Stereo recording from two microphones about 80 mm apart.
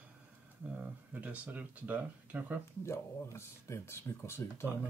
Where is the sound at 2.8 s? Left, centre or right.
Left.